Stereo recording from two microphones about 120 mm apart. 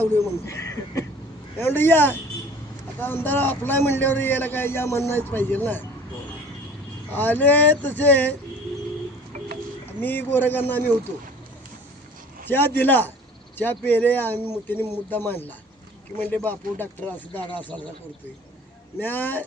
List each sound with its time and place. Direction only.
0.0 s a man's voice: 25° left (ahead or behind)
7.2 s a man's voice: 15° left (ahead or behind)
10.0 s a man's voice: 15° left (ahead or behind)
12.5 s a man's voice: 15° left (ahead or behind)
18.9 s a man's voice: 15° left (ahead or behind)